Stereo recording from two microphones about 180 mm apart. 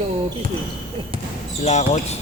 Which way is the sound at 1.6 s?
40° left (ahead or behind).